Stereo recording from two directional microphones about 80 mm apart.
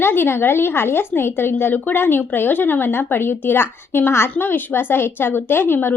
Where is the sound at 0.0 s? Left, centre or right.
Left.